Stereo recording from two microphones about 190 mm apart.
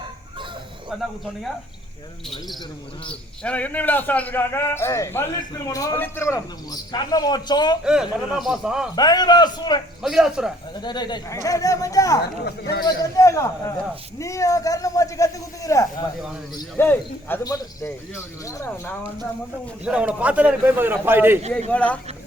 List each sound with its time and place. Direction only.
0.9 s speech: centre (ahead or behind)
3.1 s a man's voice: 5° left (ahead or behind)
7.9 s speech: 5° right (ahead or behind)
9.0 s a man's voice: 20° left (ahead or behind)
10.0 s speech: 5° right (ahead or behind)
10.8 s a man's voice: 20° left (ahead or behind)
19.8 s a man's voice: 5° right (ahead or behind)
21.7 s a man's voice: 5° left (ahead or behind)